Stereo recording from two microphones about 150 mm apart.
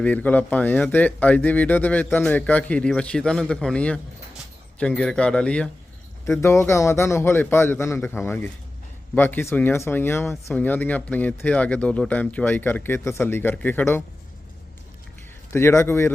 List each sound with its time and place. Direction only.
0.0 s speech: 10° left (ahead or behind)
6.2 s speech: 20° left (ahead or behind)
15.5 s speech: 20° left (ahead or behind)